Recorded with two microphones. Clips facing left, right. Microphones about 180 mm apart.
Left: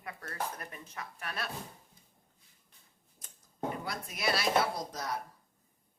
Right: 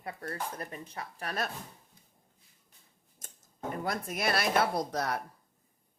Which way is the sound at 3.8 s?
50° right (ahead or behind).